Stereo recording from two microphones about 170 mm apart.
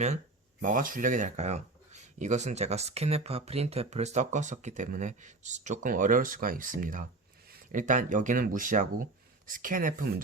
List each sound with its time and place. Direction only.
0.6 s speech: 50° right (ahead or behind)